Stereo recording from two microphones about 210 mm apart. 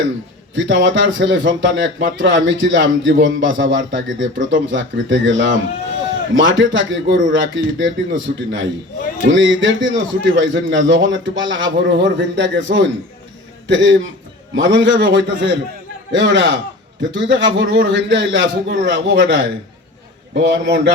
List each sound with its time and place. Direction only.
0.5 s a man's voice: 60° right (ahead or behind)